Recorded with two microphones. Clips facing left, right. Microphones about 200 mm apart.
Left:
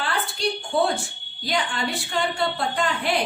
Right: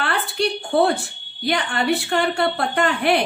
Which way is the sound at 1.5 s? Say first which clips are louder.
Right 5 dB; 65° right (ahead or behind).